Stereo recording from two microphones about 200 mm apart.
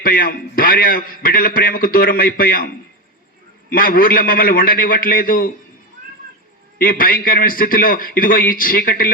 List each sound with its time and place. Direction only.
0.0 s a man's voice: 45° left (ahead or behind)
3.7 s a man's voice: 45° left (ahead or behind)
6.7 s a man's voice: 45° left (ahead or behind)